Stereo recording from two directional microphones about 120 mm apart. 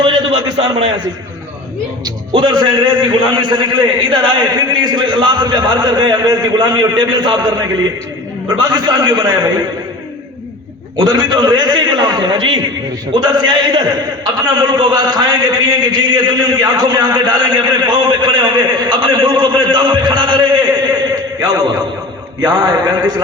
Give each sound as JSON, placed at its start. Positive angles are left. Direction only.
{"t": 0.5, "sound": "a man's voice", "side_deg": -50}
{"t": 2.0, "sound": "a man's voice", "side_deg": -40}
{"t": 8.4, "sound": "a man's voice", "side_deg": -35}
{"t": 10.9, "sound": "a man's voice", "side_deg": -40}